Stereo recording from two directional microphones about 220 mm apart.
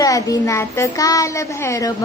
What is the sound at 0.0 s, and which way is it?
A woman's voice, 15° left (ahead or behind).